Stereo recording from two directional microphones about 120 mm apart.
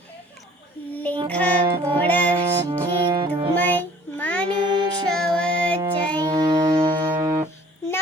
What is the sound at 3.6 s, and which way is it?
Child singing, 15° left (ahead or behind).